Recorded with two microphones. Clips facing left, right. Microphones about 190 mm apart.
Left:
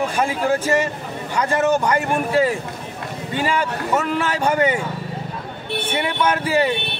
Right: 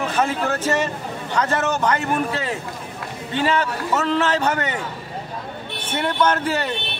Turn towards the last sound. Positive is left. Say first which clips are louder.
# left 3 dB
turn(degrees=10)  # may be behind; listen again after turning